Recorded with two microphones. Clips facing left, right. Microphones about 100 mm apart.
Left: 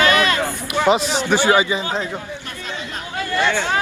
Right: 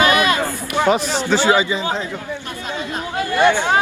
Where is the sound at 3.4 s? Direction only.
15° right (ahead or behind).